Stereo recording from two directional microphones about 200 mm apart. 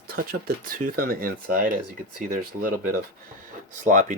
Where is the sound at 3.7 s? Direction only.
40° right (ahead or behind).